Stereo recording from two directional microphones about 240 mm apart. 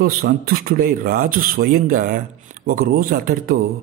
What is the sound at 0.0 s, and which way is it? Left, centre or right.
A man's voice, right.